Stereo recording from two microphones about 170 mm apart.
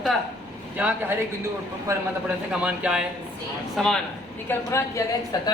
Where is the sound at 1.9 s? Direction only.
20° right (ahead or behind).